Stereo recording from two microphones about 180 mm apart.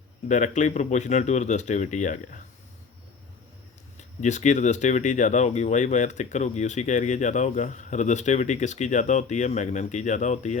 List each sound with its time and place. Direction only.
0.3 s speech: 45° left (ahead or behind)
3.9 s speech: 40° left (ahead or behind)